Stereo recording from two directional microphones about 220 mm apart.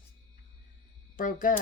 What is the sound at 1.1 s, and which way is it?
Speech, 35° left (ahead or behind).